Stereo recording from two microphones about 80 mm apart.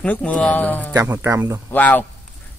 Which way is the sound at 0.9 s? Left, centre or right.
Right.